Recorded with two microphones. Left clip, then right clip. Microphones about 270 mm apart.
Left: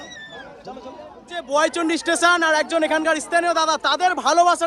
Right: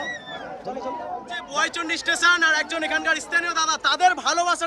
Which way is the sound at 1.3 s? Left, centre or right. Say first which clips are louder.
Left 6 dB; centre.